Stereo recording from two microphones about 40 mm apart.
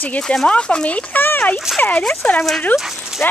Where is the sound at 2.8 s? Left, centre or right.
Centre.